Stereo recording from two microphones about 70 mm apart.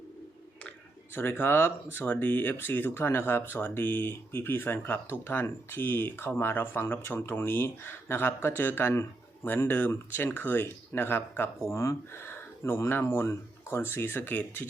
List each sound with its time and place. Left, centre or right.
1.1 s speech: left